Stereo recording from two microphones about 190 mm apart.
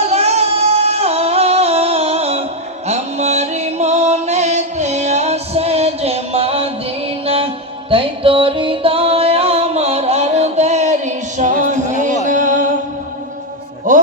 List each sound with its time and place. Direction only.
0.1 s music: 35° right (ahead or behind)
7.9 s music: 30° right (ahead or behind)
13.9 s music: 40° right (ahead or behind)